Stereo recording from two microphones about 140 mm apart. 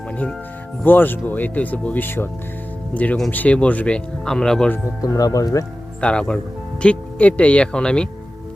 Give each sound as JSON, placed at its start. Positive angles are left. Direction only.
{"t": 0.9, "sound": "speech", "side_deg": 15}
{"t": 4.9, "sound": "speech", "side_deg": 25}
{"t": 6.0, "sound": "speech", "side_deg": 5}